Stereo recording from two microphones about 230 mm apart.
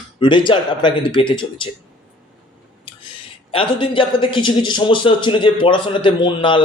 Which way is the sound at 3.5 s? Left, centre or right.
Left.